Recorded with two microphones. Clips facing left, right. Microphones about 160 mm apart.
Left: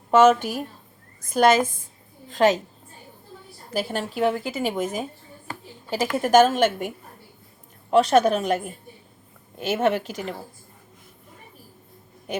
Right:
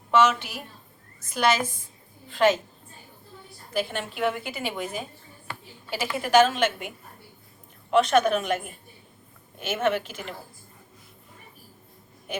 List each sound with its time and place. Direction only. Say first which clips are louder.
0.1 s a woman's voice: left 6 dB; 45° left (ahead or behind)
3.7 s a woman's voice: left 2 dB; 40° left (ahead or behind)
7.9 s a woman's voice: left 3 dB; 35° left (ahead or behind)